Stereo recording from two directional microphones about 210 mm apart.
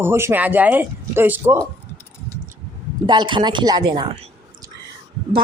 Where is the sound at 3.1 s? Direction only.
20° right (ahead or behind).